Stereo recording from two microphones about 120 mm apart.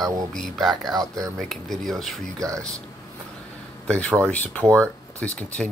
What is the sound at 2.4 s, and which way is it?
Speech, 25° right (ahead or behind).